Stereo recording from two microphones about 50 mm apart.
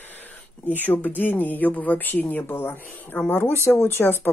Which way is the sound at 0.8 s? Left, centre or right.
Left.